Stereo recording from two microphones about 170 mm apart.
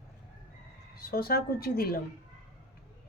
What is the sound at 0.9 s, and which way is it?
A woman's voice, 60° left (ahead or behind).